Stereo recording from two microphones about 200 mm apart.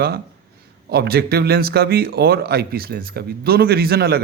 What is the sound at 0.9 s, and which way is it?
A man's voice, 50° right (ahead or behind).